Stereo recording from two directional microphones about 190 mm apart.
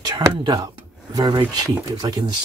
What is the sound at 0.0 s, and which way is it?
Speech, 20° right (ahead or behind).